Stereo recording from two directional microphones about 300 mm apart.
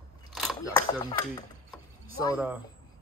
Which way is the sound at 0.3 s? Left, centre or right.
Centre.